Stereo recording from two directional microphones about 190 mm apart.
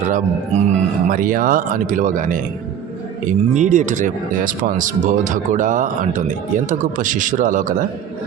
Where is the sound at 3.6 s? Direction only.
40° right (ahead or behind).